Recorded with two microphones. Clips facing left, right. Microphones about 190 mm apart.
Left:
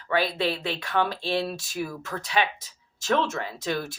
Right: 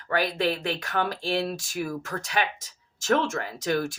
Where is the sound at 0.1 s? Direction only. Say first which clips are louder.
Even; 45° right (ahead or behind).